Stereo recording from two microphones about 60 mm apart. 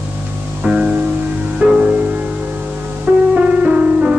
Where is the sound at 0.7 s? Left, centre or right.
Right.